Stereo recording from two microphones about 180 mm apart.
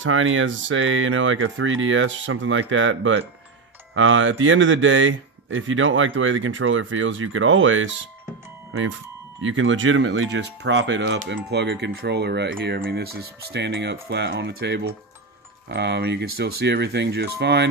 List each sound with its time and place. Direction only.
0.0 s speech: 90° right
9.4 s speech: 90° right
10.3 s speech: 80° right